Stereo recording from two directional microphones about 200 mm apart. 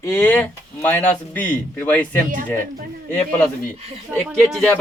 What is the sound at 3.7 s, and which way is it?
Speech, 30° right (ahead or behind).